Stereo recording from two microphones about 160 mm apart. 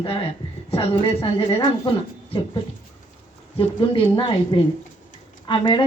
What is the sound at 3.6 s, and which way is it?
A woman's voice, 35° left (ahead or behind).